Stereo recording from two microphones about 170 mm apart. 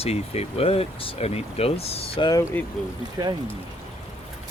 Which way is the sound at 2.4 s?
15° left (ahead or behind).